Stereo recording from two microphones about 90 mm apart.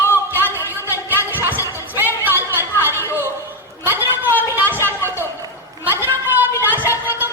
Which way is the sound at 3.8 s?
25° right (ahead or behind).